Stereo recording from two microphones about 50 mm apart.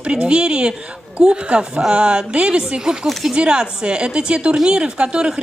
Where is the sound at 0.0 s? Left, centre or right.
Centre.